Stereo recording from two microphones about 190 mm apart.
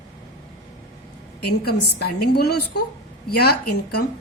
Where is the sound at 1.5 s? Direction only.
55° left (ahead or behind).